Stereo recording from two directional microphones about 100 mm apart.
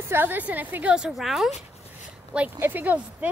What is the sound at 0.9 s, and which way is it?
Speech, 5° right (ahead or behind).